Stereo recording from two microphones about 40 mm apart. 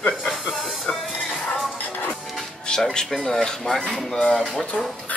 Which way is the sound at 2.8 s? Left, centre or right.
Centre.